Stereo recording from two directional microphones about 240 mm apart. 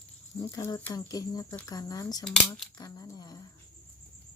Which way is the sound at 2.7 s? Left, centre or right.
Centre.